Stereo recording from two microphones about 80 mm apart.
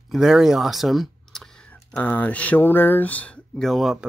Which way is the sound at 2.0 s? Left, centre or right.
Left.